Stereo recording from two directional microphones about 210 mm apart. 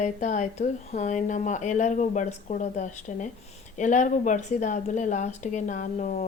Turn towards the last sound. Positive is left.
turn(degrees=35)  # may be behind; listen again after turning